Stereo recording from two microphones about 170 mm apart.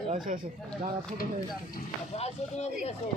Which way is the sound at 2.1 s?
40° left (ahead or behind).